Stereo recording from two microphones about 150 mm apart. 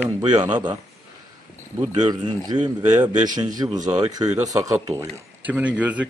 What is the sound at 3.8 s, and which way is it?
Speech, 55° right (ahead or behind).